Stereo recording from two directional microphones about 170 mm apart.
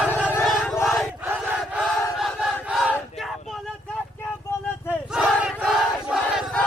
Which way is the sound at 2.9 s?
Centre (ahead or behind).